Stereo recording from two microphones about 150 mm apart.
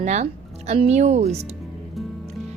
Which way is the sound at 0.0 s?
50° right (ahead or behind).